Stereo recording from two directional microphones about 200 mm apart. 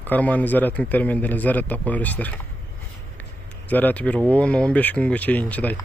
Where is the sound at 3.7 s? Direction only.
10° left (ahead or behind).